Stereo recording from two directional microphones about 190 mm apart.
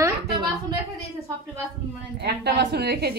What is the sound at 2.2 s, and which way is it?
Speech, 60° right (ahead or behind).